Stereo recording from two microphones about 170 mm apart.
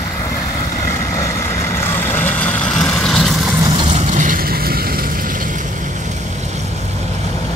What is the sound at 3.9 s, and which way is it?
Vehicle, 45° right (ahead or behind).